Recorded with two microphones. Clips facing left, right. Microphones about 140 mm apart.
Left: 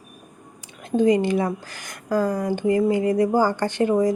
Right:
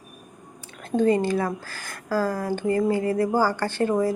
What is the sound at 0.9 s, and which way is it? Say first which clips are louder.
A woman's voice: left 2 dB; 15° left (ahead or behind).